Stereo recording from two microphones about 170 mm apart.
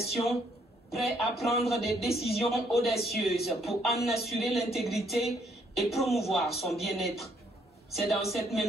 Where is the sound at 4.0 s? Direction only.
40° left (ahead or behind).